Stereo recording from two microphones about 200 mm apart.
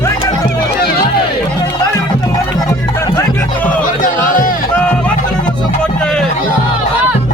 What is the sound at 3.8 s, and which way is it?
Music, 45° left (ahead or behind).